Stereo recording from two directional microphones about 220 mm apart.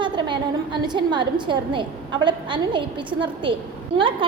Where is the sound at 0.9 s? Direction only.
20° right (ahead or behind).